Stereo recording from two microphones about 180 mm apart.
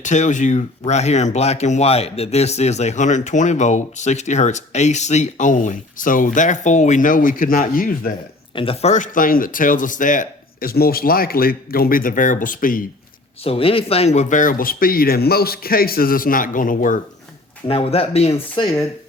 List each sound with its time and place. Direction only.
0.0 s speech: 40° left (ahead or behind)
8.5 s speech: 30° left (ahead or behind); by 12.8 s 50° left (ahead or behind)
13.4 s speech: 30° left (ahead or behind); by 17.0 s 50° left (ahead or behind)
17.7 s speech: 30° left (ahead or behind)